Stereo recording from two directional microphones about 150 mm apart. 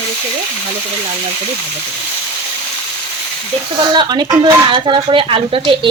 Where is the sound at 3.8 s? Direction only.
30° right (ahead or behind).